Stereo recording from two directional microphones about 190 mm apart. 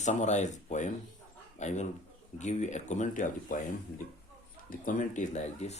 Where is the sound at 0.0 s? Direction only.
40° left (ahead or behind).